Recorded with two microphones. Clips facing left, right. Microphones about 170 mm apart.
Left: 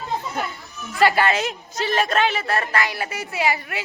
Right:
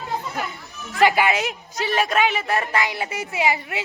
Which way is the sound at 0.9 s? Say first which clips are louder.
Even; 15° right (ahead or behind).